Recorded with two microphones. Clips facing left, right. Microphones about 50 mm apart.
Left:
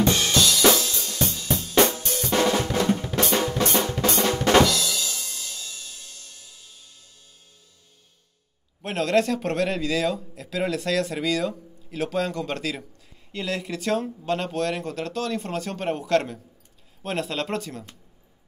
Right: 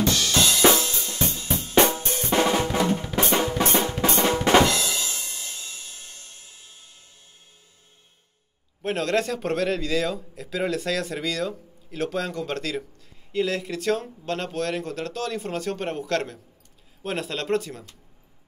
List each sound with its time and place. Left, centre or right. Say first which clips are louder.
0.0 s drum kit: left 2 dB; left
0.3 s drum kit: right 3 dB; right
2.4 s drum: left 1 dB; centre
4.6 s music: even; right
8.8 s a man's voice: left 2 dB; centre